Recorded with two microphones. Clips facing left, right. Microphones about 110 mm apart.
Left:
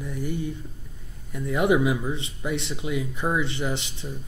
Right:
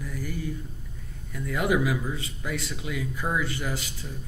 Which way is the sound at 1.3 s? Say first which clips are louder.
Left 4 dB; 20° left (ahead or behind).